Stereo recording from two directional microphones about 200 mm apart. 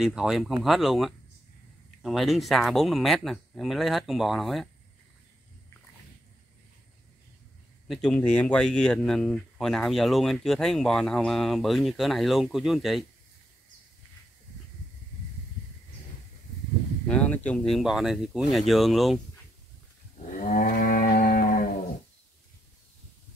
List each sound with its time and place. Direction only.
0.0 s speech: 5° right (ahead or behind)
7.9 s speech: 5° left (ahead or behind)
17.1 s speech: 5° left (ahead or behind)
20.2 s livestock: 40° left (ahead or behind)